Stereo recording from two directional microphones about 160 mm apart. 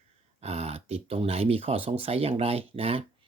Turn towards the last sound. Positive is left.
turn(degrees=-35)  # may be behind; listen again after turning